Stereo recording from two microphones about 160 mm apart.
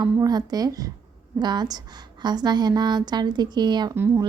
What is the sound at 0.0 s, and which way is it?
A woman's voice, 25° right (ahead or behind).